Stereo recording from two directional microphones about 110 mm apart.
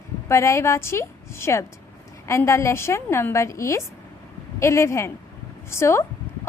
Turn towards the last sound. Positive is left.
turn(degrees=25)  # may be behind; listen again after turning